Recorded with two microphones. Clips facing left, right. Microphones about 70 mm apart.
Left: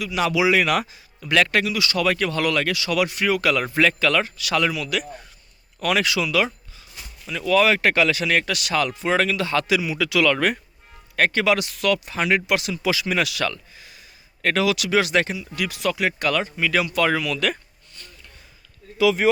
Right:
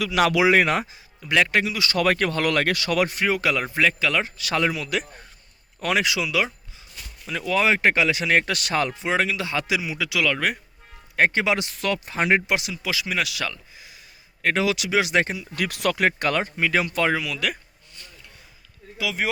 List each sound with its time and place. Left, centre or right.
0.1 s speech: right
0.8 s speech: centre
1.6 s speech: right
3.8 s speech: centre
4.4 s speech: right; by 6.5 s centre
7.4 s speech: right
9.0 s speech: centre
11.2 s speech: right
12.5 s speech: centre
14.6 s speech: right
15.4 s speech: right
17.1 s speech: centre
18.9 s speech: centre